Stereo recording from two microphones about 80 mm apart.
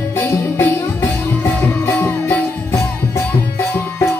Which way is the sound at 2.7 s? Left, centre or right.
Left.